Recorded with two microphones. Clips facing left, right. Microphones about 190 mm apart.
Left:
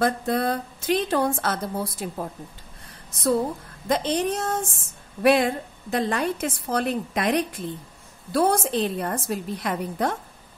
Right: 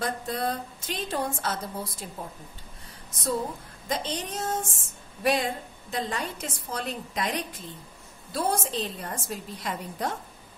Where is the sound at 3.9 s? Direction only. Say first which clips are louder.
Left 8 dB; 60° left (ahead or behind).